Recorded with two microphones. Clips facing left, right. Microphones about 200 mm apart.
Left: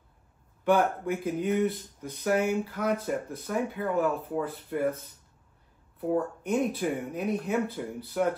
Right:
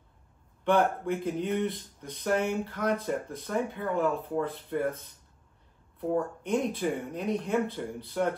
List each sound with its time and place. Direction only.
0.7 s speech: 5° left (ahead or behind)
5.9 s speech: 5° left (ahead or behind)